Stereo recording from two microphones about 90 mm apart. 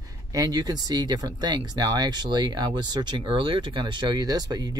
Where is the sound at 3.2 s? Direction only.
70° right (ahead or behind); by 4.7 s 45° right (ahead or behind).